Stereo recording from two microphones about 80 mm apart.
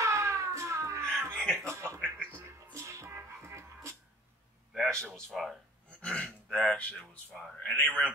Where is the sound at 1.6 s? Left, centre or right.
Right.